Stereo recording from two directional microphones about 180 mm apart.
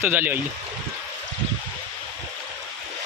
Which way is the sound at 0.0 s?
10° right (ahead or behind).